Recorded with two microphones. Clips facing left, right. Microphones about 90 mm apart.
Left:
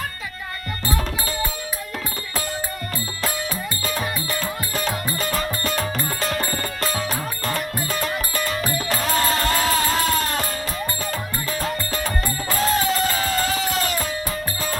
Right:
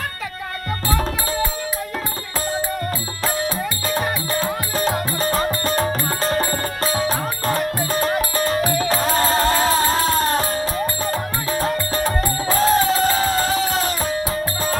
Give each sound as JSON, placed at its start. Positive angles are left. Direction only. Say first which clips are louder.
{"t": 3.8, "sound": "music", "louder": "right 3 dB", "side_deg": -40}